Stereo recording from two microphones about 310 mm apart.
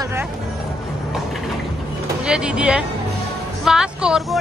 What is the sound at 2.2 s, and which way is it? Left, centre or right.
Speech, centre.